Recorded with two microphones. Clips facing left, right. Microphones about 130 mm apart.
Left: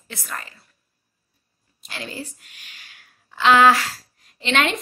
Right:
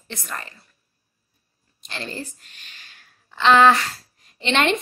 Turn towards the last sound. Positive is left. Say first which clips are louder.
# right 1 dB
turn(degrees=0)  # may be behind; listen again after turning